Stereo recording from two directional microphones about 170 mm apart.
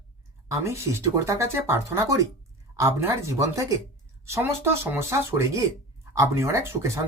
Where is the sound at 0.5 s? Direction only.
15° right (ahead or behind).